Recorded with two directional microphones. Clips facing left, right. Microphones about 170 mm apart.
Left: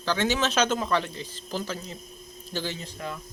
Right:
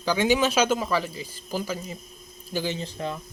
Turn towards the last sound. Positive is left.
turn(degrees=-25)  # may be behind; listen again after turning